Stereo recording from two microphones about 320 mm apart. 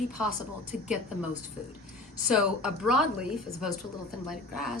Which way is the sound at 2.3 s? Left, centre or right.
Centre.